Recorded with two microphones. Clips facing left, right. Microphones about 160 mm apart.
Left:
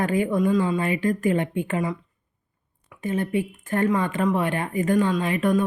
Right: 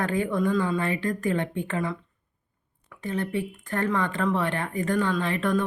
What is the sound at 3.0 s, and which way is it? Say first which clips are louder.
Speech: left 4 dB; 20° left (ahead or behind).